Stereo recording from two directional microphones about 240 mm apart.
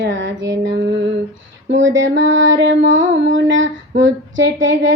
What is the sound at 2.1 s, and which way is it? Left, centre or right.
Female singing, right.